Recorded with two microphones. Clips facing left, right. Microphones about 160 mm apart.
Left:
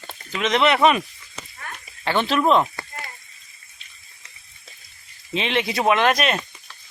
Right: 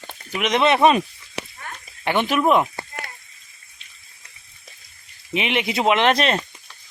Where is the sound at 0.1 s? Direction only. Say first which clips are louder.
Even; 15° right (ahead or behind).